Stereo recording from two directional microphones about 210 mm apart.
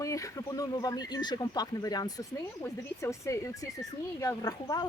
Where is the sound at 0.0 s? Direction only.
15° left (ahead or behind).